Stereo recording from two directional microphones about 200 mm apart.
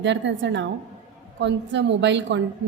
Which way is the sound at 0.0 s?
65° right (ahead or behind).